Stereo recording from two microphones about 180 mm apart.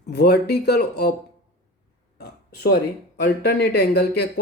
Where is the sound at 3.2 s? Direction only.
65° left (ahead or behind).